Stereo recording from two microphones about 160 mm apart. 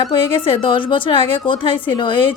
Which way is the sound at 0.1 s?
35° left (ahead or behind).